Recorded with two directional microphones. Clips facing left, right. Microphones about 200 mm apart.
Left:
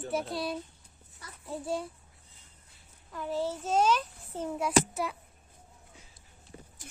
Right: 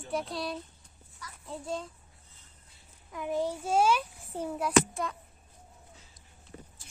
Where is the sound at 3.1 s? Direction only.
15° right (ahead or behind).